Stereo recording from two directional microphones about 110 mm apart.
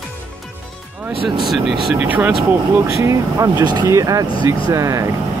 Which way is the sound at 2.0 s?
15° right (ahead or behind).